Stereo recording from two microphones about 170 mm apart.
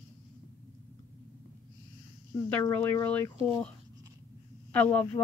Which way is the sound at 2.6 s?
15° left (ahead or behind).